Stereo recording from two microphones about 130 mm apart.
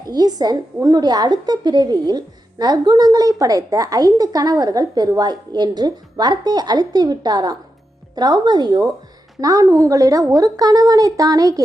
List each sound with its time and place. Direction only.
0.0 s a woman's voice: 30° right (ahead or behind)